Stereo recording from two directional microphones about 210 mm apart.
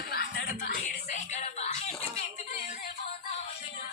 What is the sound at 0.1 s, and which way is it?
Music, 50° left (ahead or behind).